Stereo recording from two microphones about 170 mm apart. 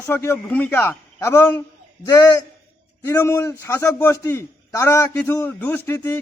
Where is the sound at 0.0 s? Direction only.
15° left (ahead or behind).